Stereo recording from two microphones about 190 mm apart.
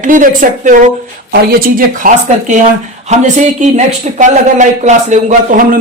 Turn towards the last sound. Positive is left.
turn(degrees=-40)  # may be behind; listen again after turning